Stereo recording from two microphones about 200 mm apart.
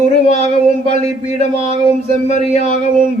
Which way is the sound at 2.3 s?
35° left (ahead or behind).